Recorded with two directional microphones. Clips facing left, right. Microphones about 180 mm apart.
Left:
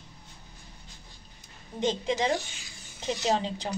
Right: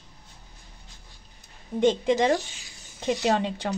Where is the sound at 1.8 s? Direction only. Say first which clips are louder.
Right 6 dB; 55° right (ahead or behind).